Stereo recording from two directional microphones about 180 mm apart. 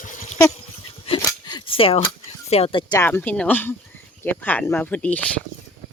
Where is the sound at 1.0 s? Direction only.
30° left (ahead or behind).